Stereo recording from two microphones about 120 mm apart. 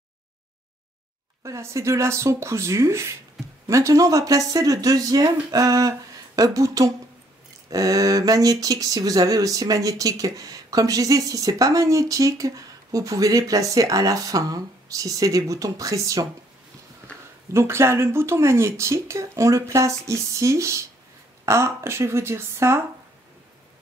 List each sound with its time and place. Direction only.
1.4 s speech: 25° right (ahead or behind)
17.5 s speech: 20° right (ahead or behind)